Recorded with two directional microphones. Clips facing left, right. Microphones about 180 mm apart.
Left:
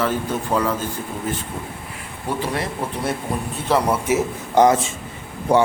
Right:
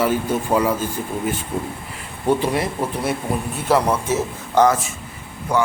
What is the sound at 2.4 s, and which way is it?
Speech, 10° right (ahead or behind).